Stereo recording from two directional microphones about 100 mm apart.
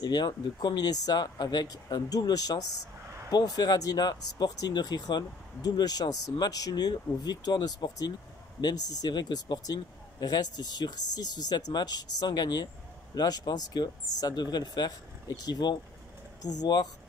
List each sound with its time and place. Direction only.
0.0 s speech: 45° left (ahead or behind)